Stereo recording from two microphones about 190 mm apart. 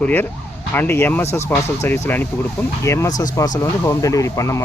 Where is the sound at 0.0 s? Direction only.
10° left (ahead or behind).